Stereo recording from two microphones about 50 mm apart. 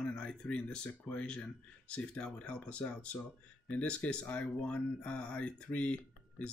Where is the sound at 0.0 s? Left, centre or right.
Centre.